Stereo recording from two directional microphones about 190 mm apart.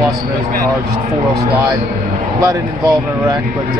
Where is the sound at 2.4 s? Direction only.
15° right (ahead or behind).